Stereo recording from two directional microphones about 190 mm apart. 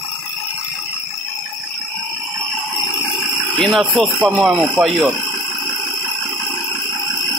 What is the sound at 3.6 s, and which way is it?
Speech, centre (ahead or behind).